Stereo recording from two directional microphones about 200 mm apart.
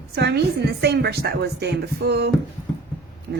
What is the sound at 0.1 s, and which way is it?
A woman's voice, 55° right (ahead or behind).